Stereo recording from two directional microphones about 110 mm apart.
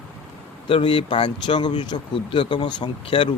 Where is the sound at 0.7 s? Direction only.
50° left (ahead or behind).